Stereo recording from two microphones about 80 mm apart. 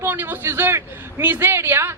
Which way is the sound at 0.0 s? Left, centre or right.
Right.